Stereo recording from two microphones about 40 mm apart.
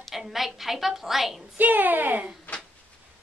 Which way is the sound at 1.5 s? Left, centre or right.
Right.